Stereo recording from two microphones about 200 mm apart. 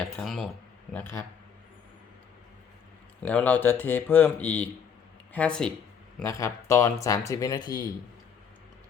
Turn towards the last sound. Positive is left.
turn(degrees=20)  # may be behind; listen again after turning